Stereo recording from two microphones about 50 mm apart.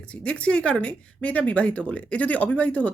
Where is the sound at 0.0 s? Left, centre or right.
Left.